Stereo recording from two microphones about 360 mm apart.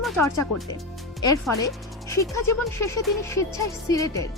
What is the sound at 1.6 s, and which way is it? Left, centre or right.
Speech, centre.